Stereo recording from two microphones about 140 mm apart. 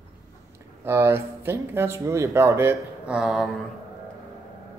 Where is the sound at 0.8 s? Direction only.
20° right (ahead or behind).